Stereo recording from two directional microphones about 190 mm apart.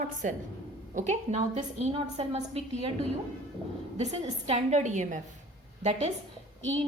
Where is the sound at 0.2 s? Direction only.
40° right (ahead or behind).